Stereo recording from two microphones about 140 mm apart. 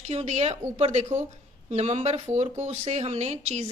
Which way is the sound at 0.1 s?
50° right (ahead or behind).